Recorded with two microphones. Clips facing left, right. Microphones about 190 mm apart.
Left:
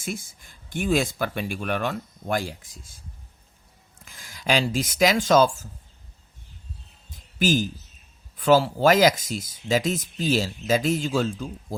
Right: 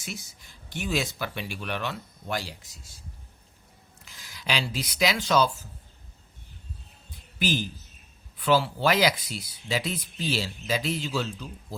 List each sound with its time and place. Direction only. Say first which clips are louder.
0.0 s speech: left 7 dB; 50° left (ahead or behind)
4.0 s speech: left 7 dB; 50° left (ahead or behind)
7.3 s speech: left 6 dB; 45° left (ahead or behind)